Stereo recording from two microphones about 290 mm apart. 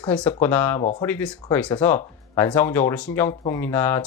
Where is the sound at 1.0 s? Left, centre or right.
Centre.